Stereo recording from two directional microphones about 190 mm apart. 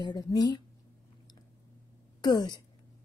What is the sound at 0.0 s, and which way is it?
Speech, 20° left (ahead or behind).